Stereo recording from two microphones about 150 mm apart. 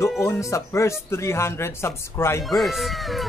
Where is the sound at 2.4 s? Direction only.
Centre (ahead or behind).